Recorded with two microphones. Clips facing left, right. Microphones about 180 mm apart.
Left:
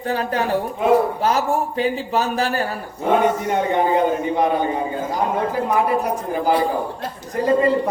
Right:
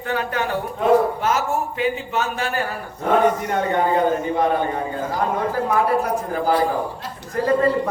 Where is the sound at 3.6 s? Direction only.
15° left (ahead or behind).